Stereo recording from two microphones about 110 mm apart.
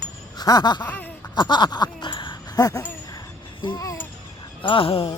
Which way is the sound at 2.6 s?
30° left (ahead or behind).